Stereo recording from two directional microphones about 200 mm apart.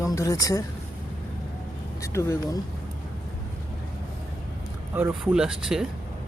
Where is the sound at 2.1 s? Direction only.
15° left (ahead or behind).